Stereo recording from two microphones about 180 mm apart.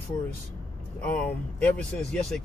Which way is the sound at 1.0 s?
10° left (ahead or behind).